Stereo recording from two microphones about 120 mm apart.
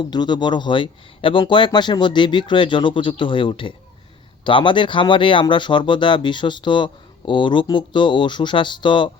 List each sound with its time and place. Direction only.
0.0 s speech: 35° left (ahead or behind)